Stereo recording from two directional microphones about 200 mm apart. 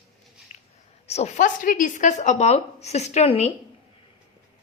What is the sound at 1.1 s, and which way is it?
Speech, 35° left (ahead or behind).